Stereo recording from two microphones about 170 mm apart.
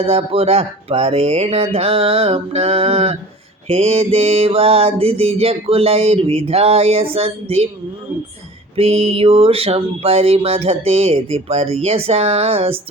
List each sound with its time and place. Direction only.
0.0 s mantra: 35° right (ahead or behind)
8.7 s mantra: 35° right (ahead or behind)